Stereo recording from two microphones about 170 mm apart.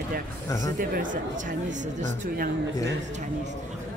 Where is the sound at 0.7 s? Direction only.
55° right (ahead or behind).